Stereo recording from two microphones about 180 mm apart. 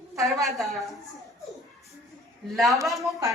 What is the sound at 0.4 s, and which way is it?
Speech, centre (ahead or behind).